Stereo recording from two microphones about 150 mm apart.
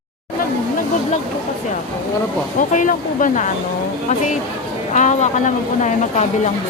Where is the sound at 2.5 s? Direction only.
60° left (ahead or behind).